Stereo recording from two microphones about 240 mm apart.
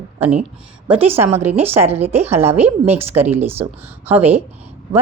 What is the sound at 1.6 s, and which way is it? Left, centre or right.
Speech, centre.